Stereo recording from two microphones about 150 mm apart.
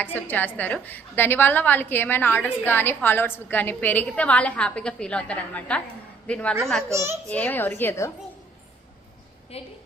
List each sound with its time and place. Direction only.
0.0 s a woman's voice: 10° left (ahead or behind)
6.9 s a child's voice: 20° right (ahead or behind)
7.3 s a woman's voice: 10° left (ahead or behind)
9.5 s a woman's voice: 45° left (ahead or behind)